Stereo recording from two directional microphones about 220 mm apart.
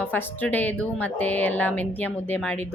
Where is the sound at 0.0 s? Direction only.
10° left (ahead or behind).